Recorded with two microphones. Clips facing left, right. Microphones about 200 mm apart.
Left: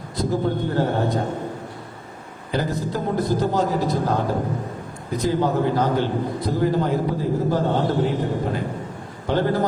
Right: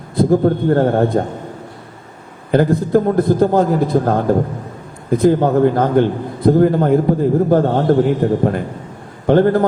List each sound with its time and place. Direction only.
0.2 s a man's voice: 55° right (ahead or behind)
2.5 s a man's voice: 55° right (ahead or behind)